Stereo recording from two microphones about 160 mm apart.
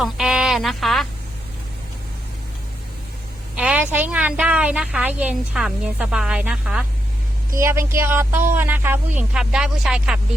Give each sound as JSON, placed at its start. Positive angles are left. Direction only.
{"t": 0.0, "sound": "speech", "side_deg": 0}
{"t": 3.5, "sound": "a woman's voice", "side_deg": -10}
{"t": 7.5, "sound": "a woman's voice", "side_deg": -15}